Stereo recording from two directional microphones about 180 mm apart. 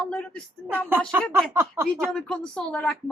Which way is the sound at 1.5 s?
15° right (ahead or behind).